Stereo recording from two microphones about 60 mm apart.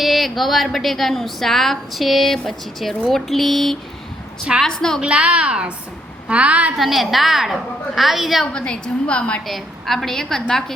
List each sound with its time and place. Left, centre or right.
0.0 s a woman's voice: centre
4.9 s a woman's voice: centre
6.7 s a woman's voice: centre
8.5 s a woman's voice: centre
9.5 s a woman's voice: centre